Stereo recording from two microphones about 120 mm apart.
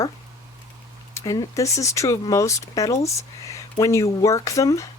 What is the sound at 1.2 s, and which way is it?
Speech, 30° left (ahead or behind).